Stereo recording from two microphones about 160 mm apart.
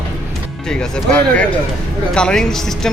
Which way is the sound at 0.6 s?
5° left (ahead or behind).